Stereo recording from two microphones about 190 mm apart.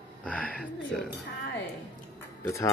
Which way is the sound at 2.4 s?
15° left (ahead or behind).